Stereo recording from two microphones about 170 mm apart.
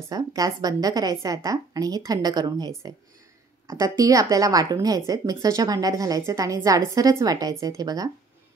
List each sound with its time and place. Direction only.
0.1 s a woman's voice: 20° right (ahead or behind)
3.7 s a woman's voice: 20° right (ahead or behind)